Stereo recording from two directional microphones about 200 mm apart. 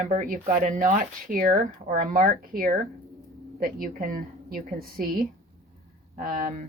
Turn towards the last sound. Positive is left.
turn(degrees=-40)  # may be behind; listen again after turning